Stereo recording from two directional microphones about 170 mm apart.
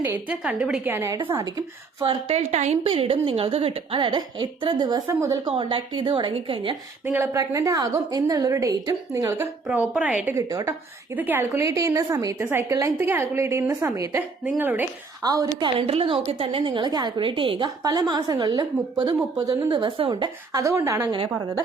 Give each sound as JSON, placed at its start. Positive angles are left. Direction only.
{"t": 0.0, "sound": "a woman's voice", "side_deg": -10}
{"t": 2.0, "sound": "a woman's voice", "side_deg": -35}
{"t": 5.5, "sound": "a woman's voice", "side_deg": -30}
{"t": 7.0, "sound": "a woman's voice", "side_deg": -10}
{"t": 9.4, "sound": "a woman's voice", "side_deg": -10}
{"t": 10.3, "sound": "a woman's voice", "side_deg": -20}
{"t": 15.2, "sound": "a woman's voice", "side_deg": -20}
{"t": 15.9, "sound": "a woman's voice", "side_deg": -35}